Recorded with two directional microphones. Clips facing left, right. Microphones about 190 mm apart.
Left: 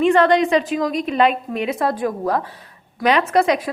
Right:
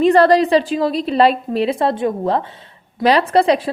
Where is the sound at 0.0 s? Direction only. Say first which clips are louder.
Right 3 dB; 35° right (ahead or behind).